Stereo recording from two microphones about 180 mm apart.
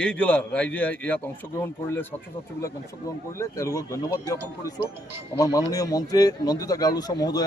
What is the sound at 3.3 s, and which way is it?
A man's voice, 15° left (ahead or behind).